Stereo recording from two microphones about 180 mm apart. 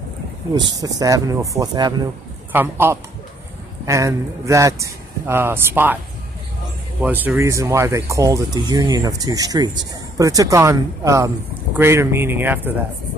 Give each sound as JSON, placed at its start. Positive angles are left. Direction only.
{"t": 0.7, "sound": "speech", "side_deg": -20}
{"t": 7.0, "sound": "speech", "side_deg": -10}